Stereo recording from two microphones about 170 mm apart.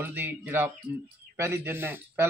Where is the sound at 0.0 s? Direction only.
10° right (ahead or behind).